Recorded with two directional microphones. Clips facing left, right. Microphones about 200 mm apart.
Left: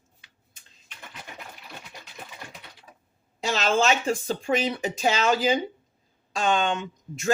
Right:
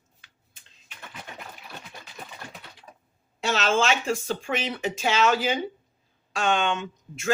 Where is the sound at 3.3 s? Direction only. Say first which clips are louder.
Even; 40° left (ahead or behind).